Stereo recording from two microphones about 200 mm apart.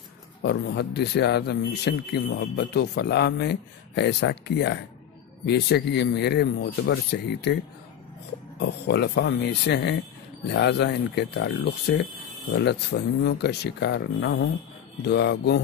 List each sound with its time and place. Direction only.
0.4 s speech: 55° left (ahead or behind)
8.5 s speech: 55° left (ahead or behind)